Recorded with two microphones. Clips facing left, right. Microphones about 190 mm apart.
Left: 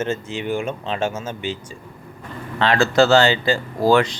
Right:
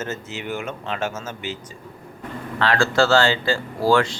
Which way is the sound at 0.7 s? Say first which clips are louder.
Left 3 dB; 15° left (ahead or behind).